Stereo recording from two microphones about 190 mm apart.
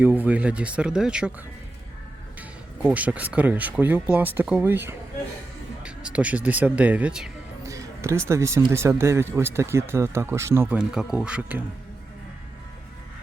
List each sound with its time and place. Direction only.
0.0 s speech: 10° right (ahead or behind)
2.4 s speech: 10° right (ahead or behind)
7.6 s speech: 15° right (ahead or behind)